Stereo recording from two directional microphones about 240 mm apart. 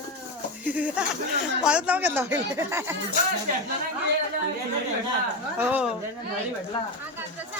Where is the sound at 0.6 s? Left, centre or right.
Centre.